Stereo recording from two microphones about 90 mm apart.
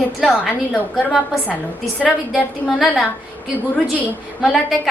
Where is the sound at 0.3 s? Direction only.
5° right (ahead or behind).